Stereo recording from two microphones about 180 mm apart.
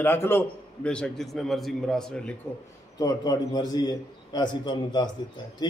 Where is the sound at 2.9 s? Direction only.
20° left (ahead or behind).